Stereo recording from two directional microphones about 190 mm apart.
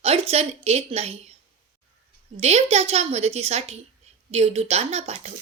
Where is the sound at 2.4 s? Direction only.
35° right (ahead or behind).